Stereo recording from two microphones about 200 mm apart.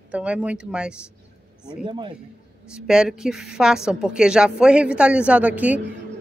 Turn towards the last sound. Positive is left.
turn(degrees=-5)  # may be behind; listen again after turning